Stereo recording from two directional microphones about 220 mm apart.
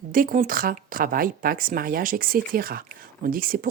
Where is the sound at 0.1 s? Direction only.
40° right (ahead or behind).